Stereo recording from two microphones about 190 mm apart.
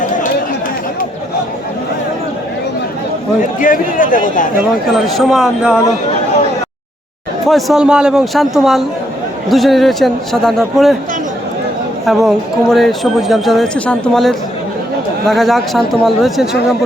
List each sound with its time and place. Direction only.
3.6 s a man's voice: 45° left (ahead or behind)
4.9 s speech: centre (ahead or behind)
7.4 s speech: centre (ahead or behind)
12.0 s speech: centre (ahead or behind)